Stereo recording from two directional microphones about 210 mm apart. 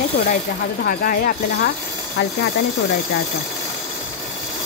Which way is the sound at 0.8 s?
45° left (ahead or behind).